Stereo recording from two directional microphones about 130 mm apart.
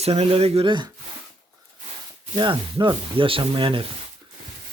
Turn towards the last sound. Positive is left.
turn(degrees=-40)  # may be behind; listen again after turning